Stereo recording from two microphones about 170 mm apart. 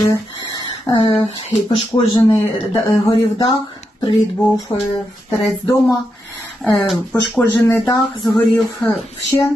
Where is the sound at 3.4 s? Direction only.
30° left (ahead or behind).